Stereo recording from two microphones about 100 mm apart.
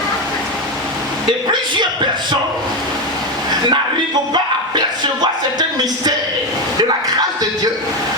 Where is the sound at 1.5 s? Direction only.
50° right (ahead or behind).